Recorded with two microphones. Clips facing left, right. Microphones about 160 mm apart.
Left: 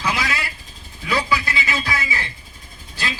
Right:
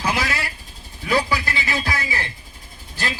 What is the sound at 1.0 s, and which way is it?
Speech, 45° right (ahead or behind).